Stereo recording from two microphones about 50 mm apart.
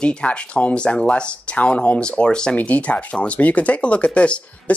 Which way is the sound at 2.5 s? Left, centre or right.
Left.